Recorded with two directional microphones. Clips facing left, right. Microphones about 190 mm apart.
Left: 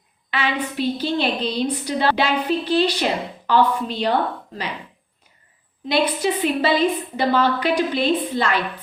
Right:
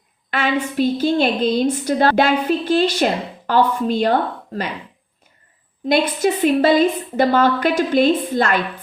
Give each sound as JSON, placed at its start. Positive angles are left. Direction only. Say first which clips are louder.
{"t": 0.3, "sound": "a woman's voice", "louder": "right 4 dB", "side_deg": -50}
{"t": 5.9, "sound": "a woman's voice", "louder": "right 3 dB", "side_deg": -50}